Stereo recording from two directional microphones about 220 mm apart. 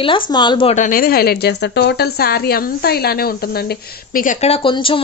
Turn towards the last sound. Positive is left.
turn(degrees=25)  # may be behind; listen again after turning